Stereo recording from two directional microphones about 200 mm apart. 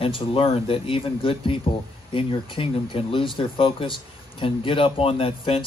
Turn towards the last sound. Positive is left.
turn(degrees=30)  # may be behind; listen again after turning